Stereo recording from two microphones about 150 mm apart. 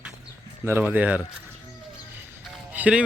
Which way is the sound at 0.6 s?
15° right (ahead or behind).